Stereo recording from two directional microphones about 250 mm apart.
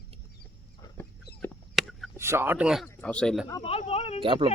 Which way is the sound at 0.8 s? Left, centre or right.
Centre.